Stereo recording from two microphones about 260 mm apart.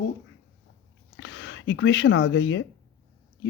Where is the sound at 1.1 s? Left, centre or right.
Left.